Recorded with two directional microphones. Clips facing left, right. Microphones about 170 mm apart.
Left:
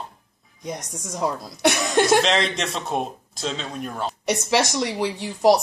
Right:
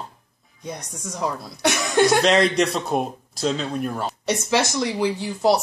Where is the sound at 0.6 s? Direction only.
20° left (ahead or behind).